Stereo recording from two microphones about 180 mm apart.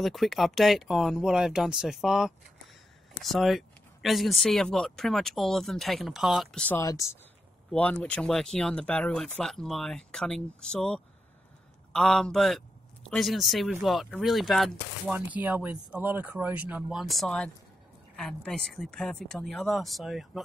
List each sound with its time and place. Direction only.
0.0 s speech: centre (ahead or behind)
6.7 s speech: 15° left (ahead or behind)
7.7 s speech: 5° left (ahead or behind)